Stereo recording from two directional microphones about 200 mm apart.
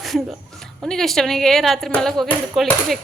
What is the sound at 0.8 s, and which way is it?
A woman's voice, centre (ahead or behind).